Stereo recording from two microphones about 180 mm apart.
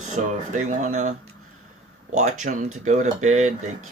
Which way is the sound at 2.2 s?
40° right (ahead or behind).